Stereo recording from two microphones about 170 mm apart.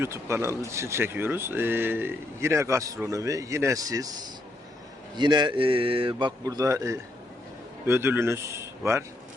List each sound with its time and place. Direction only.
0.0 s speech: 15° right (ahead or behind)
5.1 s a man's voice: 25° right (ahead or behind)